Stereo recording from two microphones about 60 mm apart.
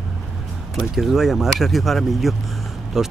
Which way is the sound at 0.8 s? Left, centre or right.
Centre.